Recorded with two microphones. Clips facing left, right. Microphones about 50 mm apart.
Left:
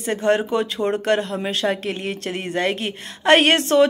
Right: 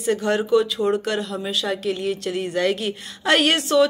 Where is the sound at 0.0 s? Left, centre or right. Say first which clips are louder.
Left 2 dB; left.